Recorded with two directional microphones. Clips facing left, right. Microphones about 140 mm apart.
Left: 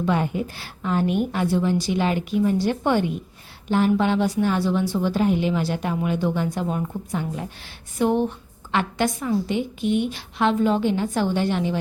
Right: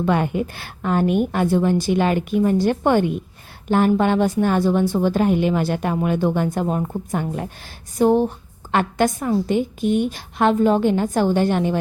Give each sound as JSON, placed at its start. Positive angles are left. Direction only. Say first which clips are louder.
{"t": 0.0, "sound": "a woman's voice", "louder": "right 3 dB", "side_deg": -60}
{"t": 7.9, "sound": "speech", "louder": "right 4 dB", "side_deg": -35}
{"t": 8.7, "sound": "a woman's voice", "louder": "right 4 dB", "side_deg": -45}